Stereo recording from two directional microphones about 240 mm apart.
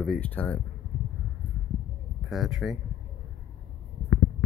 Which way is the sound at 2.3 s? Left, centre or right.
Centre.